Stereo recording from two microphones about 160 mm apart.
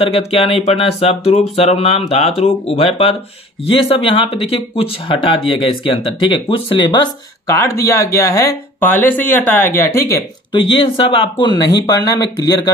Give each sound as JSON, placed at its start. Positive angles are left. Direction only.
{"t": 0.1, "sound": "speech", "side_deg": 35}
{"t": 10.5, "sound": "speech", "side_deg": 35}